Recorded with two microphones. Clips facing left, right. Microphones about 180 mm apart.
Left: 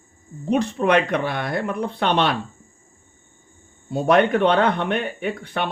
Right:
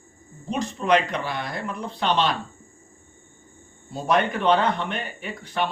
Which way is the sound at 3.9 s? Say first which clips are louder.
Left 6 dB; 60° left (ahead or behind).